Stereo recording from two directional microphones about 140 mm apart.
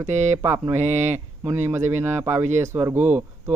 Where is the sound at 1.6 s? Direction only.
20° right (ahead or behind).